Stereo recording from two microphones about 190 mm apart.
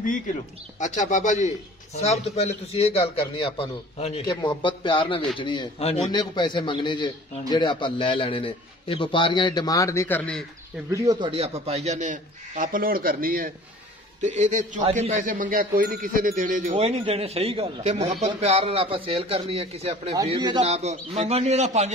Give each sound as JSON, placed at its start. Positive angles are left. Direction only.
{"t": 0.7, "sound": "a man's voice", "side_deg": 40}
{"t": 10.9, "sound": "a man's voice", "side_deg": -20}
{"t": 14.2, "sound": "a man's voice", "side_deg": -40}
{"t": 20.7, "sound": "a man's voice", "side_deg": -35}